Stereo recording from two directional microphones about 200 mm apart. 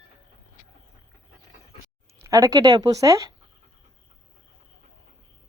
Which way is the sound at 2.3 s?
15° right (ahead or behind).